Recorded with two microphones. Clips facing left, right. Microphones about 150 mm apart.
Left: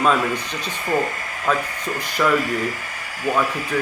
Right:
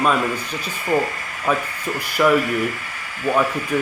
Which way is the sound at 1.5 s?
10° right (ahead or behind).